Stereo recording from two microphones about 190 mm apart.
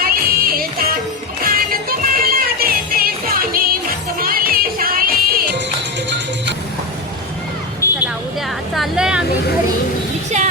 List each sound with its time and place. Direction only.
0.0 s music: 50° right (ahead or behind)
7.8 s a sound: 15° left (ahead or behind)
8.7 s vehicle: centre (ahead or behind)